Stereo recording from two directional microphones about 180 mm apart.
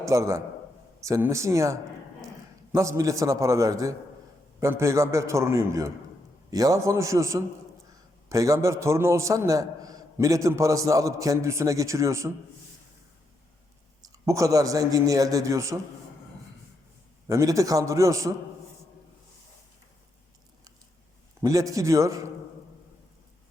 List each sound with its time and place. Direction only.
0.0 s a man's voice: 15° right (ahead or behind)
14.0 s a man's voice: 20° right (ahead or behind)
17.2 s a man's voice: 20° right (ahead or behind)
21.4 s a man's voice: 20° right (ahead or behind)